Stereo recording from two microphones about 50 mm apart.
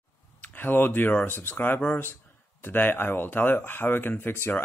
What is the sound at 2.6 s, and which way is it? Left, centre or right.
Speech, left.